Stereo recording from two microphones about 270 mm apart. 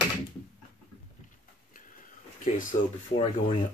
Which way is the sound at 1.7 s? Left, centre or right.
Left.